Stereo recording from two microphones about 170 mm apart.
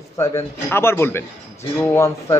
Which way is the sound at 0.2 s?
20° left (ahead or behind).